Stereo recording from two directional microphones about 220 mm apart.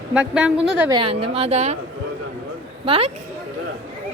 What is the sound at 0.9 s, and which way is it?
Speech, 25° right (ahead or behind).